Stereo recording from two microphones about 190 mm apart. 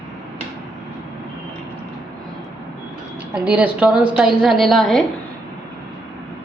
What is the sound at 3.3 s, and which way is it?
A woman's voice, 5° right (ahead or behind).